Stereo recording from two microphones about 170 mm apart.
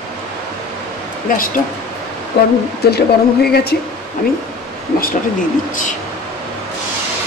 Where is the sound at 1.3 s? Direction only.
50° left (ahead or behind).